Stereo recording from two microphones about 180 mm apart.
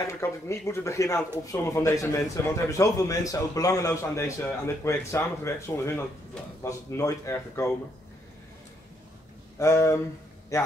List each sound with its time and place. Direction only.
0.0 s a man's voice: 15° left (ahead or behind)
9.6 s a man's voice: 15° left (ahead or behind)